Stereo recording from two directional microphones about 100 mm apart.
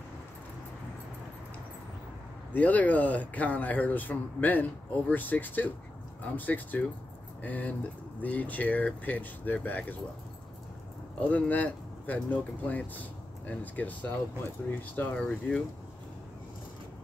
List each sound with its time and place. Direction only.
2.5 s speech: 15° left (ahead or behind)
11.1 s speech: 15° left (ahead or behind)